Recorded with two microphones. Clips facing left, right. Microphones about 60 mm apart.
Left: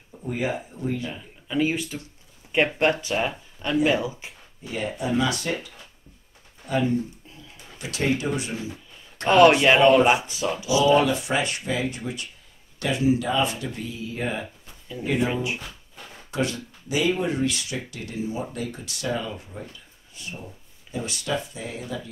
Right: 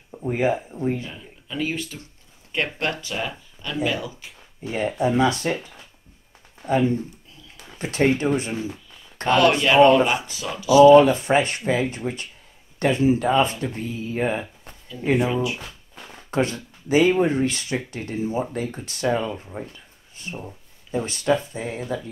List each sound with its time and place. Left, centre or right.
0.1 s speech: right
1.1 s speech: centre
4.6 s speech: right
9.3 s speech: left
10.7 s speech: right
16.3 s speech: right